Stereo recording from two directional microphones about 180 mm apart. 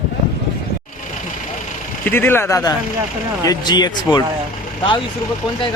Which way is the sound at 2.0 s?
10° left (ahead or behind).